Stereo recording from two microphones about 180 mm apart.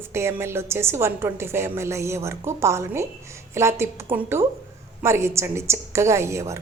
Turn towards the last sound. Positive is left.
turn(degrees=-15)  # may be behind; listen again after turning